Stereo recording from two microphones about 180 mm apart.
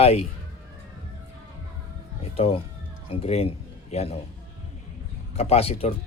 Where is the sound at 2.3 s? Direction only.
35° left (ahead or behind).